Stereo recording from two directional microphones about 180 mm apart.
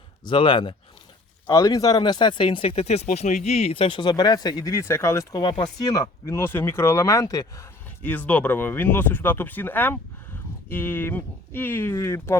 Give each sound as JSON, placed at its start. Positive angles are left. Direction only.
{"t": 0.3, "sound": "speech", "side_deg": 25}